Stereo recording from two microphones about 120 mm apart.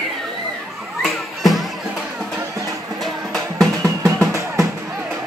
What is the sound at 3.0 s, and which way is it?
Music, centre (ahead or behind).